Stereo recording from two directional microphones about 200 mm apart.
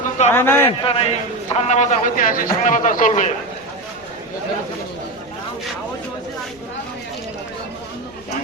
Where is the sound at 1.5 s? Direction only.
35° left (ahead or behind).